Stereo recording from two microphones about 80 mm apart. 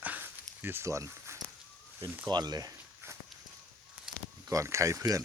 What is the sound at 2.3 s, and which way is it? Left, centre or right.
Speech, right.